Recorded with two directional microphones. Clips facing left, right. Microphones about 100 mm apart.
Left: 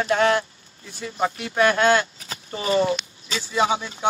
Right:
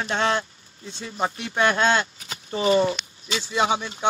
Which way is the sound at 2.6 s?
30° right (ahead or behind).